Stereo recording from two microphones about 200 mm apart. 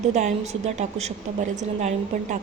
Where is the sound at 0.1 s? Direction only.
35° right (ahead or behind).